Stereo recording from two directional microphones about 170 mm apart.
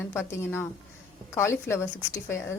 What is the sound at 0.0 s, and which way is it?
Speech, 15° left (ahead or behind).